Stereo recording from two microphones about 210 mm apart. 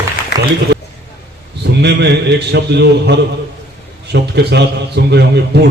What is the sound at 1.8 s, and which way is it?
A man's voice, 55° right (ahead or behind).